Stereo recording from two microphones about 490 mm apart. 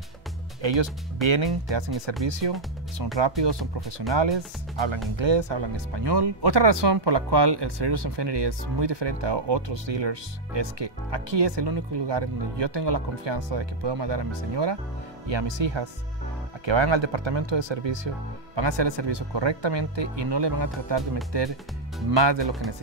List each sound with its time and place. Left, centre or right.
0.6 s speech: right